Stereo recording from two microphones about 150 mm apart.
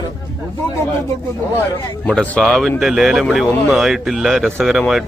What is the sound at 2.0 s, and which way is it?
A man's voice, 10° left (ahead or behind).